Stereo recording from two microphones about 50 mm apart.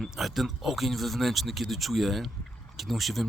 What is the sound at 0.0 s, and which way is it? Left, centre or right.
Speech, centre.